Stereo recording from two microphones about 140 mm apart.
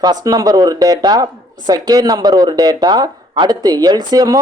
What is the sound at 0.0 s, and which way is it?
Speech, 30° right (ahead or behind).